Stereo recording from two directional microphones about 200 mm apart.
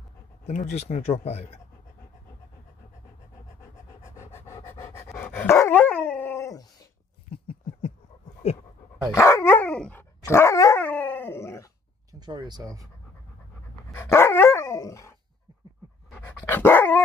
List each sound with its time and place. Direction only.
0.5 s speech: 35° left (ahead or behind)
4.0 s dog: 15° left (ahead or behind)
7.2 s a sound: 30° left (ahead or behind)
8.4 s dog: 30° left (ahead or behind)
9.1 s dog: 15° left (ahead or behind)
12.1 s speech: 20° right (ahead or behind)
13.9 s dog: 10° left (ahead or behind)